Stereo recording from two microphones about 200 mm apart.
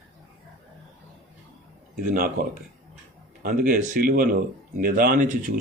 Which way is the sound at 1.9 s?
45° right (ahead or behind).